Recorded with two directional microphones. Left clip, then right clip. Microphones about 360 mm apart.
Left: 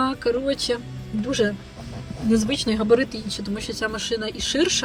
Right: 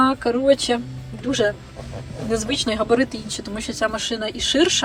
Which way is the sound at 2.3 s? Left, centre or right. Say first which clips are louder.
Right 1 dB; centre.